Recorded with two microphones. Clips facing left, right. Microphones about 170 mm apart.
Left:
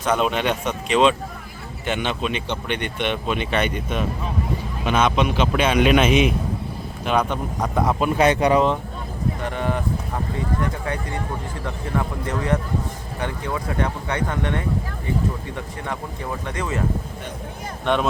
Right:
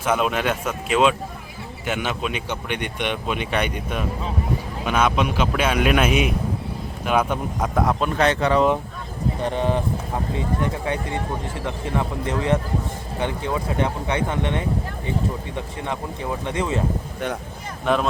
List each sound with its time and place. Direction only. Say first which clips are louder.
0.0 s speech: left 1 dB; 5° right (ahead or behind); by 8.6 s 15° left (ahead or behind)
9.4 s speech: right 4 dB; 30° right (ahead or behind)
17.8 s speech: even; centre (ahead or behind)